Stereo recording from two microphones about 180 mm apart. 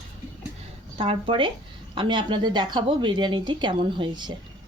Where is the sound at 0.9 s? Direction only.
30° right (ahead or behind).